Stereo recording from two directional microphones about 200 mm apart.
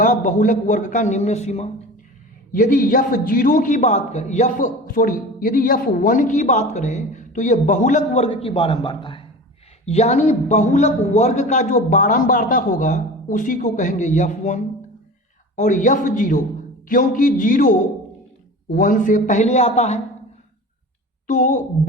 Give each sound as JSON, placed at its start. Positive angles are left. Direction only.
{"t": 0.0, "sound": "a man's voice", "side_deg": 40}
{"t": 2.5, "sound": "a man's voice", "side_deg": 45}
{"t": 21.2, "sound": "a man's voice", "side_deg": 40}